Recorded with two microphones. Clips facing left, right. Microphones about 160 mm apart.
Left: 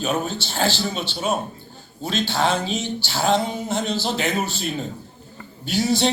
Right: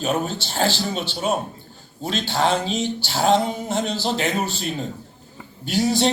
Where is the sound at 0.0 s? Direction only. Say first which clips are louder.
Right 1 dB; 35° right (ahead or behind).